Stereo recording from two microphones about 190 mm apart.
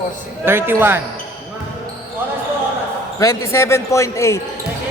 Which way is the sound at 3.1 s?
15° left (ahead or behind).